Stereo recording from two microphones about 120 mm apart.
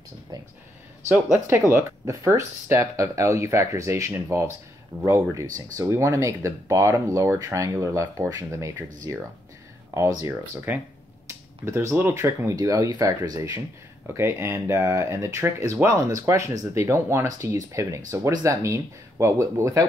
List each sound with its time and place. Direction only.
0.3 s speech: 35° right (ahead or behind)
1.7 s speech: 20° right (ahead or behind)